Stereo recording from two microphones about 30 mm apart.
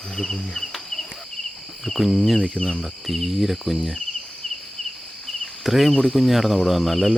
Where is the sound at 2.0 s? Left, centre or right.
Centre.